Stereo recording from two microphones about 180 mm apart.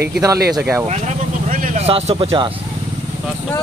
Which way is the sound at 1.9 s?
35° right (ahead or behind).